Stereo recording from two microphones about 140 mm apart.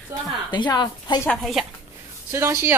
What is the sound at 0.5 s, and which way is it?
Speech, 30° left (ahead or behind).